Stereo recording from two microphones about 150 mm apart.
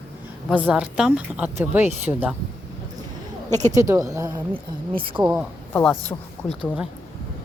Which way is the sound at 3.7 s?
20° right (ahead or behind).